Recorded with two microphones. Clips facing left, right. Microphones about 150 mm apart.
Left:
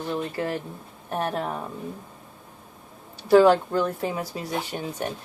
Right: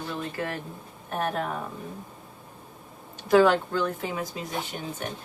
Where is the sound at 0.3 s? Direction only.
30° left (ahead or behind).